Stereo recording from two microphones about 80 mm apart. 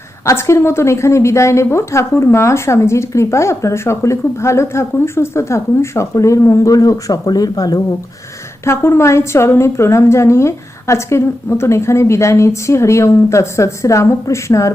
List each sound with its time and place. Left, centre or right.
0.3 s a woman's voice: left
8.6 s a woman's voice: left